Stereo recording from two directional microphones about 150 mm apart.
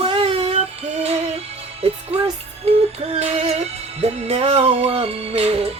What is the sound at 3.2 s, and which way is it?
Music, 50° right (ahead or behind).